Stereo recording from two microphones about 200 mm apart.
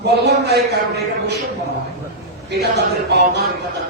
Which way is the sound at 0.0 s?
55° right (ahead or behind).